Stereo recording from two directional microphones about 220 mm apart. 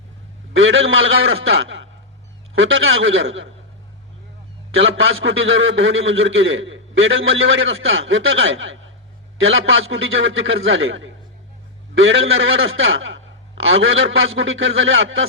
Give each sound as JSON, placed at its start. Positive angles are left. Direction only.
{"t": 0.5, "sound": "a man's voice", "side_deg": -60}
{"t": 4.7, "sound": "a man's voice", "side_deg": -65}